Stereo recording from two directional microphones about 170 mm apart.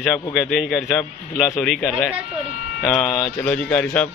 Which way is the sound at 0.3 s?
Centre (ahead or behind).